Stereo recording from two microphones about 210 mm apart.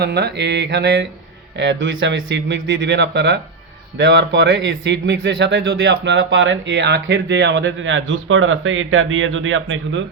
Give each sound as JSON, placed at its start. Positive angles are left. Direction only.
{"t": 0.0, "sound": "speech", "side_deg": -50}